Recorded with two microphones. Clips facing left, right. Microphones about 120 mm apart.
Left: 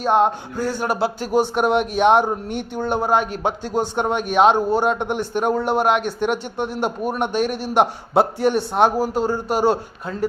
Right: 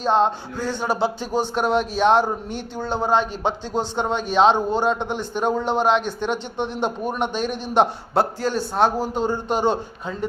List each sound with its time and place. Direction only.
0.0 s a man's voice: 10° left (ahead or behind)
8.4 s a man's voice: 25° left (ahead or behind)
8.7 s a man's voice: 10° left (ahead or behind)